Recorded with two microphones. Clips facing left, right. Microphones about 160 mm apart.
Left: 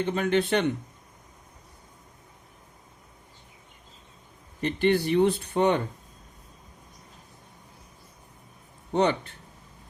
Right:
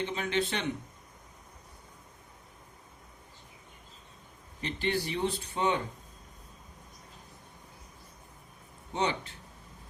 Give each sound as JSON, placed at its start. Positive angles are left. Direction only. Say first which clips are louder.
{"t": 0.0, "sound": "speech", "louder": "left 7 dB", "side_deg": 55}
{"t": 4.6, "sound": "speech", "louder": "left 9 dB", "side_deg": 55}
{"t": 8.9, "sound": "speech", "louder": "left 7 dB", "side_deg": 55}